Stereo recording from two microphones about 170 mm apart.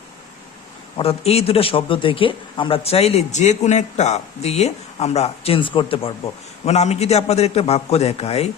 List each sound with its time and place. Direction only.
0.9 s a man's voice: 35° left (ahead or behind)